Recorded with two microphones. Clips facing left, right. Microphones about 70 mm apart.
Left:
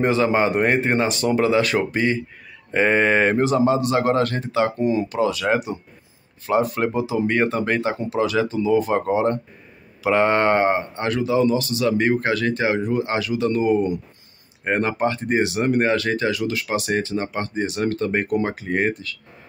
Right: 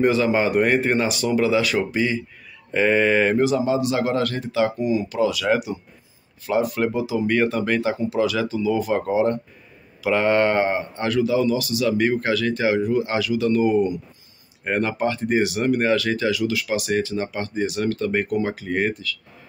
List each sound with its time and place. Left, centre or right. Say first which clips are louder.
0.0 s speech: even; left